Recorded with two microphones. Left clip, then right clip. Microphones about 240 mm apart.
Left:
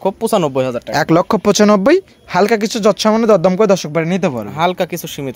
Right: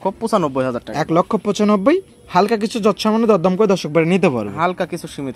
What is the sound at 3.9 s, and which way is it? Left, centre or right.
Speech, centre.